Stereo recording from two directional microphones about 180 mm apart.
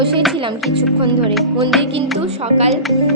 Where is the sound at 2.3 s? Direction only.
35° right (ahead or behind).